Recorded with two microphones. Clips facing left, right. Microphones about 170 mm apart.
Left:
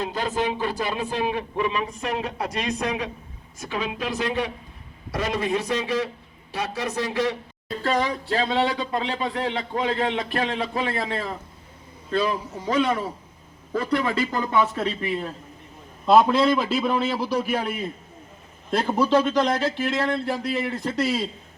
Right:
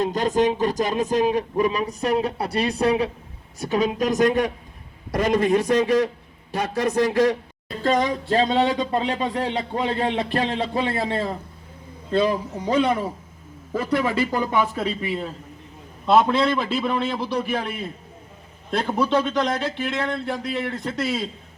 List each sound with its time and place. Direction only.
0.0 s a woman's voice: 45° right (ahead or behind)
7.9 s speech: 40° right (ahead or behind)
13.9 s speech: 15° right (ahead or behind); by 21.2 s centre (ahead or behind)